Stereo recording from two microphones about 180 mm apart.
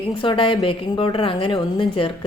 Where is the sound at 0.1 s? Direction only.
25° left (ahead or behind).